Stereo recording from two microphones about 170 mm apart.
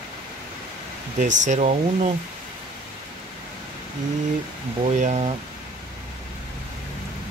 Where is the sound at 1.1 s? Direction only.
45° right (ahead or behind).